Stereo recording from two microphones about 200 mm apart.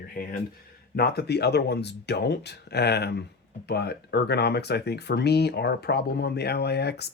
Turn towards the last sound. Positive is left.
turn(degrees=55)  # may be behind; listen again after turning